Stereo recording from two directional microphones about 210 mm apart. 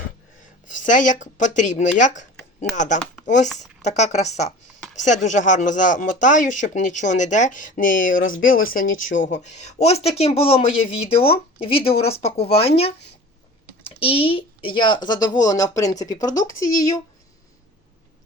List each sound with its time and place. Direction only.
0.4 s speech: 40° left (ahead or behind)
8.1 s speech: 70° left (ahead or behind)
8.6 s a man's voice: 40° left (ahead or behind); by 17.0 s 15° left (ahead or behind)